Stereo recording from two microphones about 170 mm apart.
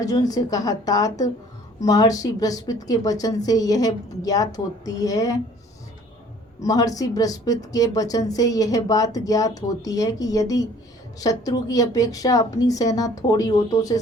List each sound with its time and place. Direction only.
0.0 s a woman's voice: 20° left (ahead or behind)
6.6 s a woman's voice: 20° left (ahead or behind)